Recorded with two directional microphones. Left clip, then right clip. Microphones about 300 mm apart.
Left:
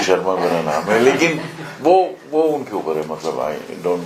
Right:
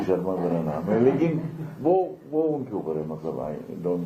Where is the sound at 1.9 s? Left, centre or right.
Left.